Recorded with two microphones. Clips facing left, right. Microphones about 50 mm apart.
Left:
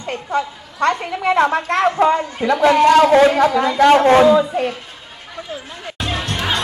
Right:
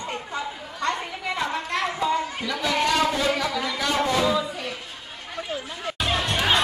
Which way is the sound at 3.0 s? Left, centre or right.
Left.